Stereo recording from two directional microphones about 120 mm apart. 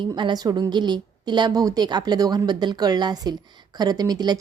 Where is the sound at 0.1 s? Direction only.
35° right (ahead or behind).